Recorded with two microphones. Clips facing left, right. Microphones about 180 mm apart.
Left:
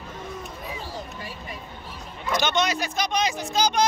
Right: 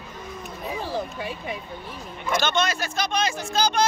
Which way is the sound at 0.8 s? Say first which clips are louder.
Right 6 dB; 65° right (ahead or behind).